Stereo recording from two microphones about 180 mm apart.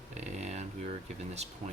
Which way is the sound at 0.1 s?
40° right (ahead or behind).